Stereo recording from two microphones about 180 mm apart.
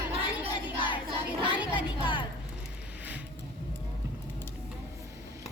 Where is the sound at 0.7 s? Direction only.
25° left (ahead or behind).